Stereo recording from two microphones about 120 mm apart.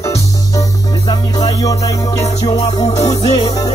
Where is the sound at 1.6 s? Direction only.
30° left (ahead or behind).